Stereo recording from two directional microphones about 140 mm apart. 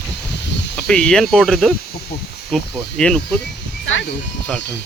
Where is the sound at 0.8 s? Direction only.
5° left (ahead or behind).